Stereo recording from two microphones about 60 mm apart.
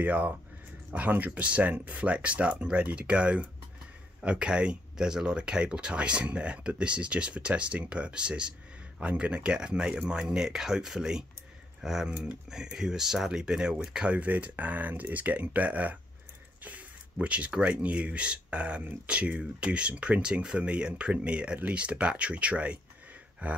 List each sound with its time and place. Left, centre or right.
0.0 s speech: right